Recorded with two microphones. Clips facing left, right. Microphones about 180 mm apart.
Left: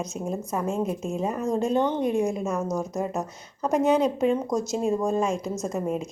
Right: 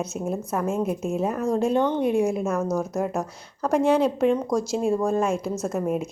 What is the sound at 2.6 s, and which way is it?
Speech, 15° left (ahead or behind).